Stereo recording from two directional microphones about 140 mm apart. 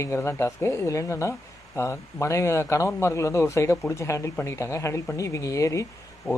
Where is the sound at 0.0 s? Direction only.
20° left (ahead or behind).